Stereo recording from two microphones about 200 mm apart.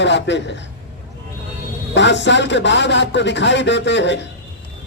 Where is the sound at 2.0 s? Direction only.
65° left (ahead or behind).